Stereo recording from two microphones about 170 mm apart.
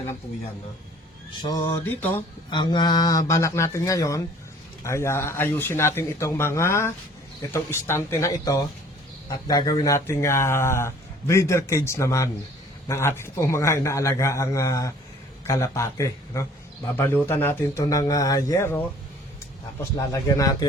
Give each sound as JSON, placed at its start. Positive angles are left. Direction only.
{"t": 1.4, "sound": "speech", "side_deg": 20}
{"t": 2.5, "sound": "speech", "side_deg": 25}
{"t": 20.0, "sound": "speech", "side_deg": 15}